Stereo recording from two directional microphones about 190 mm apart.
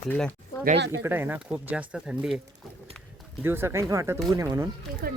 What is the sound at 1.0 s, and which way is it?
Speech, 10° right (ahead or behind).